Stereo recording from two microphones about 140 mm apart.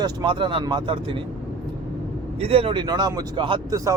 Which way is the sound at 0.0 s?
35° right (ahead or behind).